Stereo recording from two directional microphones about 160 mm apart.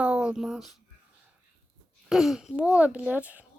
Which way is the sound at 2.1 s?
Centre (ahead or behind).